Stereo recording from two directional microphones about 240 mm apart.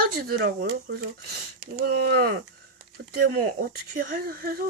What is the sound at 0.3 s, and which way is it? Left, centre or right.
Speech, right.